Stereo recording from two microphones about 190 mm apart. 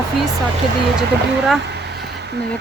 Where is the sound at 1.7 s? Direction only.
60° right (ahead or behind).